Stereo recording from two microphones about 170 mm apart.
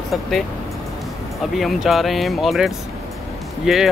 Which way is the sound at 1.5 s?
Centre (ahead or behind).